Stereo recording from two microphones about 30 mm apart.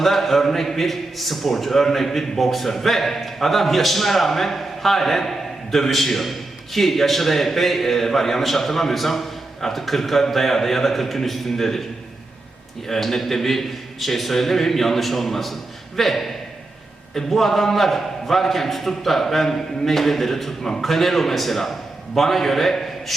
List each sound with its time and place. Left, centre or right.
0.0 s a man's voice: centre
12.9 s a man's voice: centre